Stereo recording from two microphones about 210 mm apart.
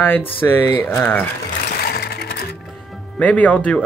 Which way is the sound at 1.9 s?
50° left (ahead or behind).